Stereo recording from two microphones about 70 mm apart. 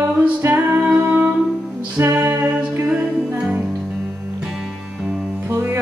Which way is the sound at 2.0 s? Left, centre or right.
Right.